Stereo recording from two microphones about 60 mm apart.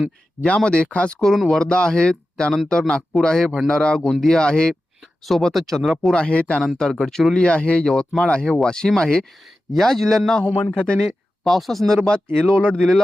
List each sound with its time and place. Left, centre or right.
0.4 s speech: centre
1.3 s speech: centre
1.6 s speech: centre
6.1 s speech: centre
7.0 s speech: centre
7.4 s speech: centre
10.7 s speech: left
11.0 s speech: centre
12.0 s speech: centre